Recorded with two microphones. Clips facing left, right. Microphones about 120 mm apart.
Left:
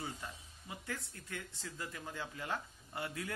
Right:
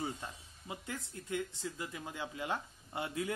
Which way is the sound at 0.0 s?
20° right (ahead or behind).